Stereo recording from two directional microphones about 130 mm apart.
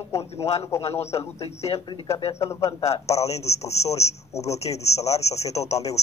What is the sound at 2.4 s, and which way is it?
Speech, 20° left (ahead or behind).